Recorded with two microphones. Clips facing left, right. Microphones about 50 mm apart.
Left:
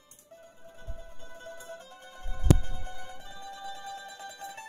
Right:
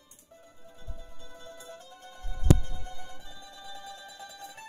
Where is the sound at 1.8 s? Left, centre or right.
Left.